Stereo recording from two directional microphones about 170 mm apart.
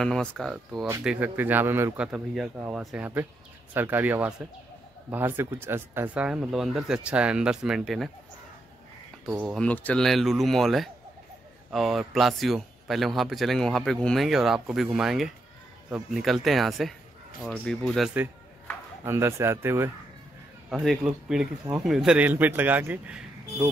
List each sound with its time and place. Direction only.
0.0 s a man's voice: 5° left (ahead or behind); by 2.8 s 10° right (ahead or behind)
2.8 s a man's voice: centre (ahead or behind)
9.5 s a man's voice: 5° left (ahead or behind)
19.0 s speech: 15° right (ahead or behind)
20.8 s a man's voice: centre (ahead or behind)